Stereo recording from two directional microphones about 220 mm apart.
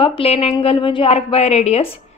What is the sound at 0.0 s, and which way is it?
A woman's voice, 25° left (ahead or behind).